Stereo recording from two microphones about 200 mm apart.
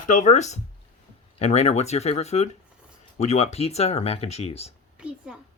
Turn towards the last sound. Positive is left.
turn(degrees=-5)  # may be behind; listen again after turning